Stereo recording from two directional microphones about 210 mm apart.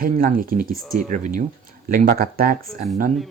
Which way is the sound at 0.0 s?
40° right (ahead or behind).